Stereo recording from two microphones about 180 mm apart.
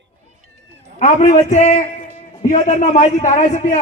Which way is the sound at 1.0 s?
45° left (ahead or behind).